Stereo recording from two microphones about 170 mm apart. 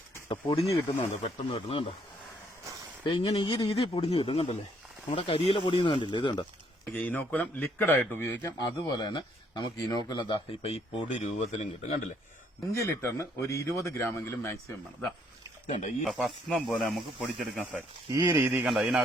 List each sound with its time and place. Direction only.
0.3 s speech: 30° left (ahead or behind)
3.0 s speech: 30° left (ahead or behind)
6.9 s a man's voice: 10° left (ahead or behind); by 12.0 s 45° left (ahead or behind)
12.7 s a man's voice: 15° left (ahead or behind)
15.6 s speech: 45° left (ahead or behind)
16.0 s a man's voice: centre (ahead or behind)
18.2 s speech: 15° right (ahead or behind)
18.5 s a man's voice: 5° right (ahead or behind)